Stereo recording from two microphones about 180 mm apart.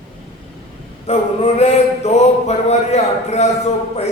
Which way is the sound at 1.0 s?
35° left (ahead or behind).